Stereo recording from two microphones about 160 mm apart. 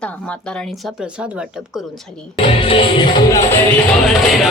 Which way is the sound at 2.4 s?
35° left (ahead or behind).